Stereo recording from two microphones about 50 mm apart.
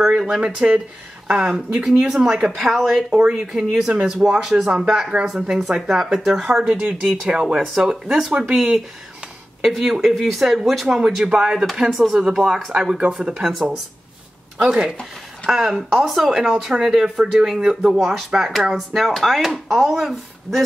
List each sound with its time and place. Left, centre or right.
0.0 s speech: centre
0.6 s speech: centre
6.4 s speech: centre
15.4 s speech: centre